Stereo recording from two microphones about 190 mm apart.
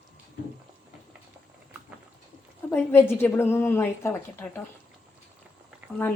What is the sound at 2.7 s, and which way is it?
A woman's voice, 10° left (ahead or behind).